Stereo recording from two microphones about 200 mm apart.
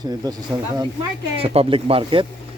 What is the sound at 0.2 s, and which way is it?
Speech, 20° right (ahead or behind).